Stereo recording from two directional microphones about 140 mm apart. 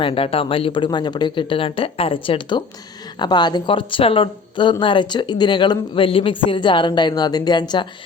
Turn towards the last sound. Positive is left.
turn(degrees=30)  # may be behind; listen again after turning